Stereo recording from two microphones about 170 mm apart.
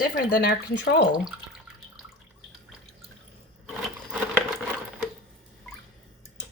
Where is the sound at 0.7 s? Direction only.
90° left.